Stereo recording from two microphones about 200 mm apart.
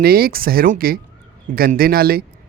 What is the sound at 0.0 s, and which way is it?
Speech, 50° right (ahead or behind).